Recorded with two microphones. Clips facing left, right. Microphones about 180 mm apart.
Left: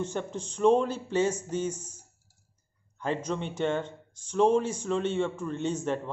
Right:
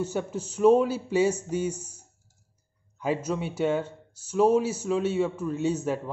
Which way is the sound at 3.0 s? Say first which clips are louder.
Right 3 dB; 10° right (ahead or behind).